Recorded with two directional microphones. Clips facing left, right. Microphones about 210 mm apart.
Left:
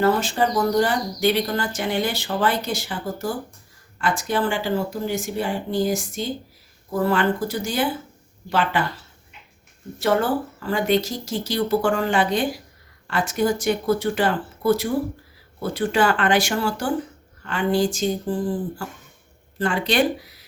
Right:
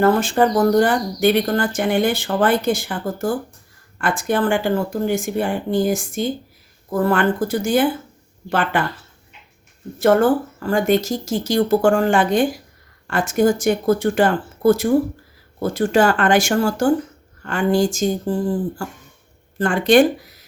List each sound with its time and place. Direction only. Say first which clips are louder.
0.0 s speech: right 4 dB; 50° right (ahead or behind)
10.0 s speech: right 6 dB; 50° right (ahead or behind)
19.5 s speech: right 7 dB; 50° right (ahead or behind)